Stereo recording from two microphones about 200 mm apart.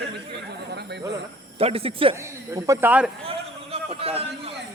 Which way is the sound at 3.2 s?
30° right (ahead or behind).